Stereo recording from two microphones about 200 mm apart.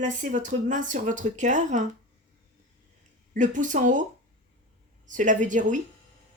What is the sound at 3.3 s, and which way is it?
Speech, 40° right (ahead or behind).